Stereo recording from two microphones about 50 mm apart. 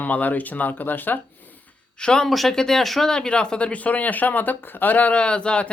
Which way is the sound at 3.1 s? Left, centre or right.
Centre.